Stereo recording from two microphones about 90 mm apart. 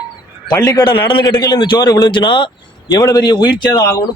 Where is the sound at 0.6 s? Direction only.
45° left (ahead or behind).